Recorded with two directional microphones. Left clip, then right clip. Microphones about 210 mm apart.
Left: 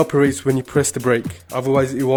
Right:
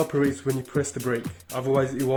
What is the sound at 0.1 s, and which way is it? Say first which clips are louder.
Speech: left 8 dB; 45° left (ahead or behind).